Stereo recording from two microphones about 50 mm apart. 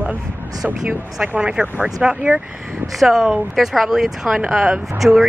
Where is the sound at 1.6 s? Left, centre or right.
Centre.